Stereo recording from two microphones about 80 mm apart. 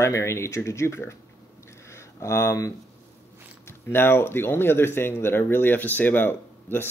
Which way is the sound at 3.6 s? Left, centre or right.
Left.